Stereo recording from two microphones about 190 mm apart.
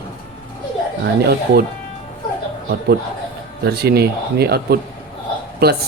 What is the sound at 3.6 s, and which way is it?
Speech, 55° right (ahead or behind).